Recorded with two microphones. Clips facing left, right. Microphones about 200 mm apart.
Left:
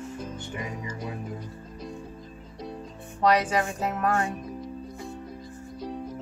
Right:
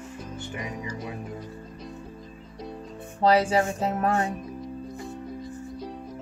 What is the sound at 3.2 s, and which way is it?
Speech, 30° right (ahead or behind).